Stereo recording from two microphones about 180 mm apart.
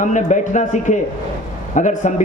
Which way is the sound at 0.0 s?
45° left (ahead or behind).